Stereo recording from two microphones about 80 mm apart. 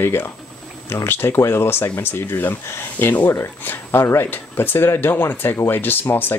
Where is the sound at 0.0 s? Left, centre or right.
Left.